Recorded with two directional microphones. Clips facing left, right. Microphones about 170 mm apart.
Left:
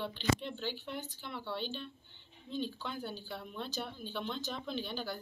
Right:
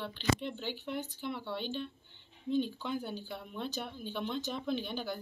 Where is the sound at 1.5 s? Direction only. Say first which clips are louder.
Right 3 dB; 55° right (ahead or behind).